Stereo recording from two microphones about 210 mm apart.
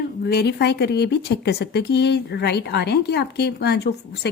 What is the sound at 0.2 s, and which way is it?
Speech, 50° left (ahead or behind).